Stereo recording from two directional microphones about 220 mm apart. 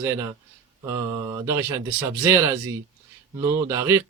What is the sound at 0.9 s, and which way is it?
Mantra, 20° right (ahead or behind).